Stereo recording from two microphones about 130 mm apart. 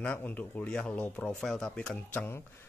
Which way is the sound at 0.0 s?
15° left (ahead or behind).